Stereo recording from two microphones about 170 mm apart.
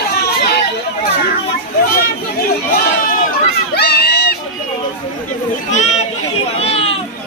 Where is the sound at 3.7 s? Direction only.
75° left (ahead or behind).